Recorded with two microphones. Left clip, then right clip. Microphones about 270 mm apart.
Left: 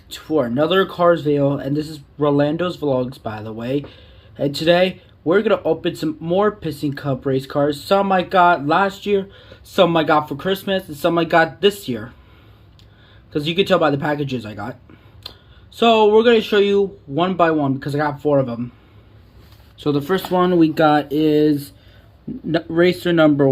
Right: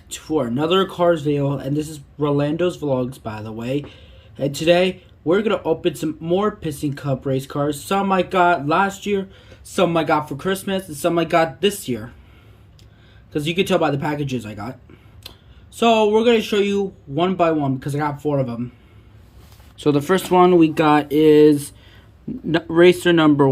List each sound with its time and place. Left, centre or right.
0.3 s speech: centre
3.8 s a sound: centre
4.5 s speech: centre
13.3 s speech: centre
15.7 s speech: centre
19.8 s speech: centre
20.2 s speech: right
20.5 s speech: centre
21.2 s speech: right